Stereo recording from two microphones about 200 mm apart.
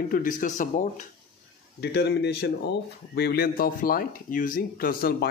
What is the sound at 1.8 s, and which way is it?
Speech, 55° left (ahead or behind).